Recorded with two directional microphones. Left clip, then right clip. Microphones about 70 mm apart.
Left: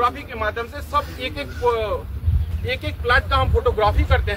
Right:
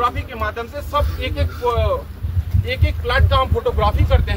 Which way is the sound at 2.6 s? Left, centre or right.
Centre.